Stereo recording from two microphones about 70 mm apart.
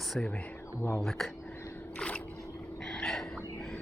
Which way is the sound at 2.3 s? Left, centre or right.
Left.